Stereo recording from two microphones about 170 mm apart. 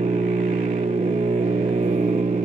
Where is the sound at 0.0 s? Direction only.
45° right (ahead or behind).